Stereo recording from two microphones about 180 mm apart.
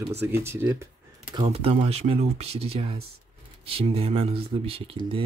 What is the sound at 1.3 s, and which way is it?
Speech, 30° right (ahead or behind).